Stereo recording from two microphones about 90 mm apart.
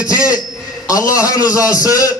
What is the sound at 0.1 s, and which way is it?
A man's voice, 40° left (ahead or behind).